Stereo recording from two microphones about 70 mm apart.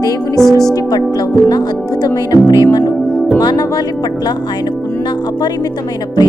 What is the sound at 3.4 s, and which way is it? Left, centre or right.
Speech, left.